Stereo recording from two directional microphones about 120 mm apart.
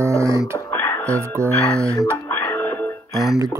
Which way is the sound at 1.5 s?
10° left (ahead or behind).